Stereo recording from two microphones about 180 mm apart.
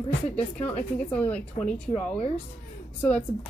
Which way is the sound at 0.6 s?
10° left (ahead or behind).